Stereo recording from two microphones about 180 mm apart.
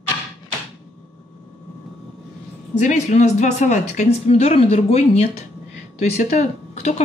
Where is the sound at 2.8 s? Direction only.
40° left (ahead or behind).